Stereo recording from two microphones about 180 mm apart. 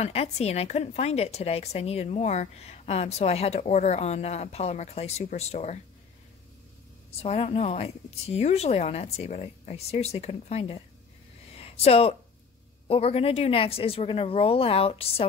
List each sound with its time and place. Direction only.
0.0 s speech: 35° left (ahead or behind)
7.2 s speech: 35° left (ahead or behind)
11.5 s a sound: 35° left (ahead or behind)
12.8 s speech: 35° left (ahead or behind)